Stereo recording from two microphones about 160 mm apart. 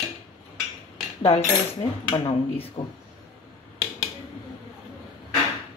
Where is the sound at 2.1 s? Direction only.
35° left (ahead or behind).